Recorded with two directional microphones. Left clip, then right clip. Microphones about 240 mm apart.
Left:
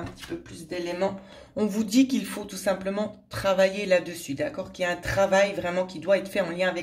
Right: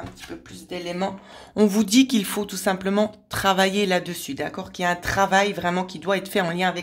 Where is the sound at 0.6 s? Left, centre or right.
Right.